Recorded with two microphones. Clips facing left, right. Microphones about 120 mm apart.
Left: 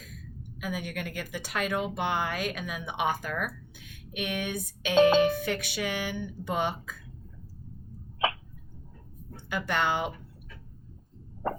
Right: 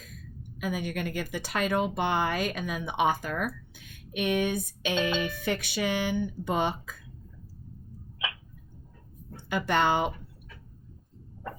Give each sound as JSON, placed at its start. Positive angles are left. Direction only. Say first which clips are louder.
{"t": 0.6, "sound": "a woman's voice", "louder": "right 3 dB", "side_deg": -30}
{"t": 4.9, "sound": "speech", "louder": "left 10 dB", "side_deg": 35}
{"t": 5.5, "sound": "speech", "louder": "right 2 dB", "side_deg": -30}
{"t": 9.5, "sound": "a woman's voice", "louder": "right 3 dB", "side_deg": -35}